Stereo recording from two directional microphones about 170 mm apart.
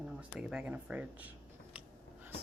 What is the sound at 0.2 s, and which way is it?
Speech, 5° right (ahead or behind).